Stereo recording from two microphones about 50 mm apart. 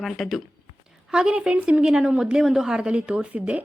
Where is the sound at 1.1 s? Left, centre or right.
Centre.